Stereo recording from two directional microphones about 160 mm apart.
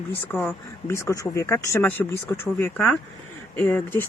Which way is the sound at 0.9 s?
20° left (ahead or behind).